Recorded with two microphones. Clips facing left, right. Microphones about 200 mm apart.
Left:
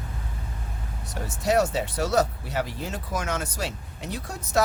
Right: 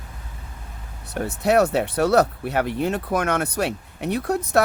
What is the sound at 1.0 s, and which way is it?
Speech, 60° right (ahead or behind).